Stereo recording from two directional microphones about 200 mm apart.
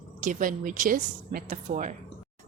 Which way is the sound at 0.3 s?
40° right (ahead or behind).